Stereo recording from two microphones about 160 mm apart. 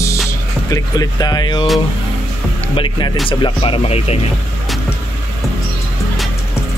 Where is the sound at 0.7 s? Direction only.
25° left (ahead or behind).